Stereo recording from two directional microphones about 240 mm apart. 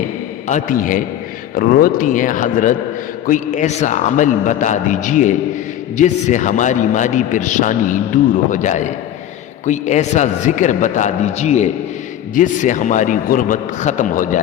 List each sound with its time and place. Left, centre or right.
0.4 s a man's voice: left